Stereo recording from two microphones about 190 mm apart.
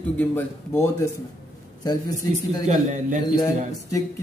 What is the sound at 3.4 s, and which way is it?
Speech, 20° left (ahead or behind).